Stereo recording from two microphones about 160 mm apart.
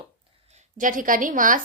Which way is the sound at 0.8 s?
55° right (ahead or behind).